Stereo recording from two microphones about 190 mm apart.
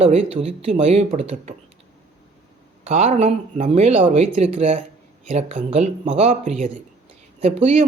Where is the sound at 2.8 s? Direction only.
35° right (ahead or behind).